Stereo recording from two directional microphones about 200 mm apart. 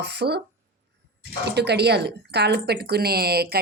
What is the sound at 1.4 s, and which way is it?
Speech, 55° right (ahead or behind).